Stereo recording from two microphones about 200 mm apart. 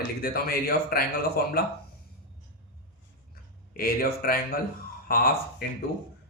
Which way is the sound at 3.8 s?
45° left (ahead or behind).